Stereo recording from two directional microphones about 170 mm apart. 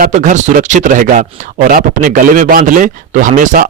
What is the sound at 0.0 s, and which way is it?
Speech, 50° right (ahead or behind).